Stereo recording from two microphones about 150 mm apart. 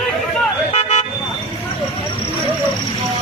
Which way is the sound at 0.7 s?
45° left (ahead or behind).